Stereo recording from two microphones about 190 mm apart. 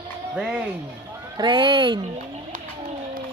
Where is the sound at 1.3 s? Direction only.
25° right (ahead or behind).